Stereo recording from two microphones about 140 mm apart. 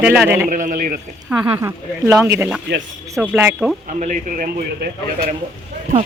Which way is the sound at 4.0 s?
65° right (ahead or behind).